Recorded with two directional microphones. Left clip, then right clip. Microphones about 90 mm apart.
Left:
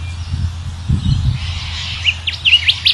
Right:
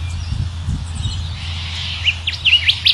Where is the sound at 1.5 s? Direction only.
40° left (ahead or behind).